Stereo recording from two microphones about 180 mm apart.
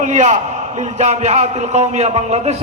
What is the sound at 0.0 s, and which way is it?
A man's voice, 40° right (ahead or behind).